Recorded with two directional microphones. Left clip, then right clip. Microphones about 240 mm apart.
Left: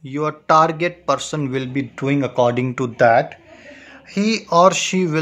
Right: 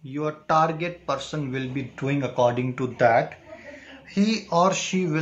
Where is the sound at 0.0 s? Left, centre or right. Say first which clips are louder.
Left 6 dB; left.